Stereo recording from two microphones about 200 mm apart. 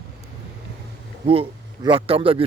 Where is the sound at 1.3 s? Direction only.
25° right (ahead or behind).